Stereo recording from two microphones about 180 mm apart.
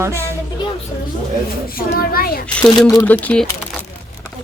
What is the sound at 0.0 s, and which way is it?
Speech, 15° right (ahead or behind).